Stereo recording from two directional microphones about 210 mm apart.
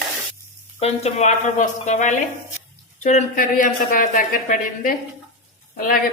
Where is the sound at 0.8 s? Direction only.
30° left (ahead or behind).